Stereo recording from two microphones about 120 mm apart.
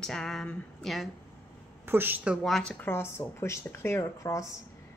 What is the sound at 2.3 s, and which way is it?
Speech, centre (ahead or behind).